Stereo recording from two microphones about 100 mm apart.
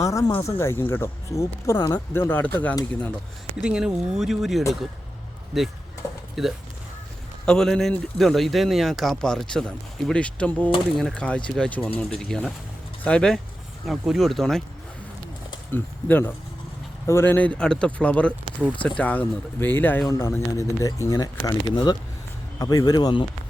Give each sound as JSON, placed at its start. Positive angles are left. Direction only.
{"t": 0.0, "sound": "speech", "side_deg": 30}
{"t": 3.6, "sound": "speech", "side_deg": -10}
{"t": 6.4, "sound": "speech", "side_deg": 0}
{"t": 15.7, "sound": "speech", "side_deg": 20}